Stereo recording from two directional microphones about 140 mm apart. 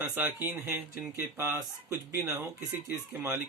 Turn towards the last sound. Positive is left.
turn(degrees=-20)  # may be behind; listen again after turning